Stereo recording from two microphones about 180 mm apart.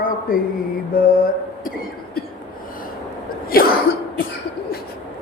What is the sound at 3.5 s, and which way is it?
Throat clearing, 55° left (ahead or behind).